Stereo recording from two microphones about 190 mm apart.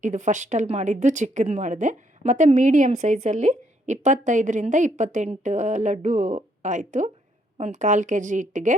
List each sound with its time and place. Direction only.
0.0 s speech: 40° right (ahead or behind)